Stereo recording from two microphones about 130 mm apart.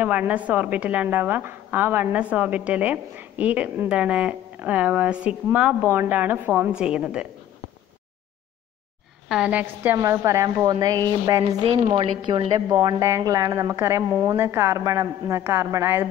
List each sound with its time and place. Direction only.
0.0 s a woman's voice: 10° right (ahead or behind)
9.3 s a woman's voice: 10° right (ahead or behind)
9.9 s a woman's voice: 25° right (ahead or behind)
12.6 s a woman's voice: 25° right (ahead or behind)